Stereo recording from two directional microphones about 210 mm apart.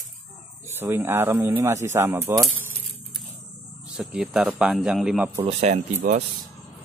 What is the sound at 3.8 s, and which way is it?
Speech, 5° right (ahead or behind).